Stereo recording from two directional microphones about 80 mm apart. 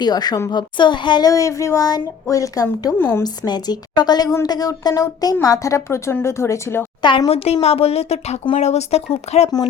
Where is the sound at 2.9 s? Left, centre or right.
Left.